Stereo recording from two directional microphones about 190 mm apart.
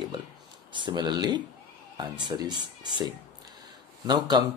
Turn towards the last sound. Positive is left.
turn(degrees=-20)  # may be behind; listen again after turning